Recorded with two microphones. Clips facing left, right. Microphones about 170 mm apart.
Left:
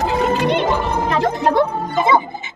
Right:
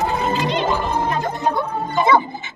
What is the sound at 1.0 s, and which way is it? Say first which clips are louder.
Music: left 4 dB; 80° left.